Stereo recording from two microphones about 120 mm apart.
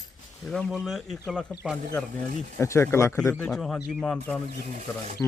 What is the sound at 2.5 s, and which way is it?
Speech, 20° left (ahead or behind).